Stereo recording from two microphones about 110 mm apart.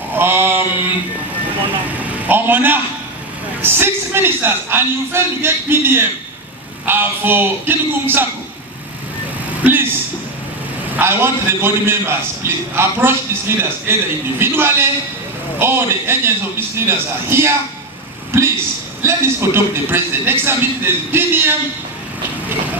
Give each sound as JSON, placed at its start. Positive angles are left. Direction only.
{"t": 0.1, "sound": "mantra", "side_deg": -20}
{"t": 2.0, "sound": "a man's voice", "side_deg": -15}
{"t": 9.6, "sound": "a sound", "side_deg": -20}
{"t": 11.0, "sound": "a man's voice", "side_deg": -20}